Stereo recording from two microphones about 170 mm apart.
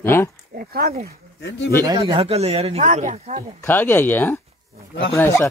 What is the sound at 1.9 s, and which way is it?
Speech, 25° right (ahead or behind).